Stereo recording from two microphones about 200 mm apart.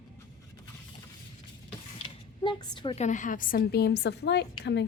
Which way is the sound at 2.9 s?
40° left (ahead or behind).